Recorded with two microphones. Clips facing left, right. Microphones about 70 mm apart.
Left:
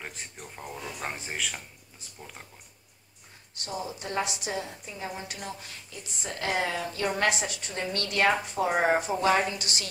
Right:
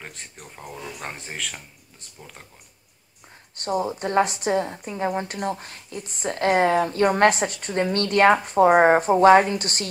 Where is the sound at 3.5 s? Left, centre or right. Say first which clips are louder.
Right 10 dB; right.